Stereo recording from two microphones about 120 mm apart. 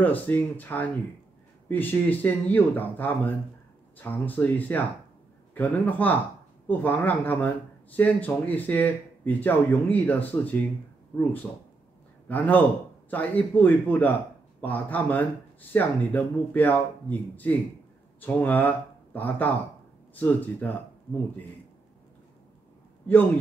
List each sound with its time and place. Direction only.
0.0 s speech: 15° left (ahead or behind)
18.2 s speech: 15° left (ahead or behind)